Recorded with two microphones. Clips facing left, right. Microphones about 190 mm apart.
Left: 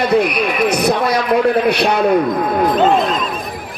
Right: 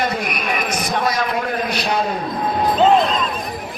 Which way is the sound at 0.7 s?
60° left (ahead or behind).